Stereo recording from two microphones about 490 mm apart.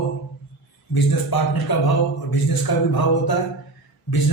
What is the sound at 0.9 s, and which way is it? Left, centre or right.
Speech, left.